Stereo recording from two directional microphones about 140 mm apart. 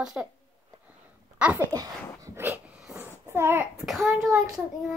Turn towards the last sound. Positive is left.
turn(degrees=0)  # may be behind; listen again after turning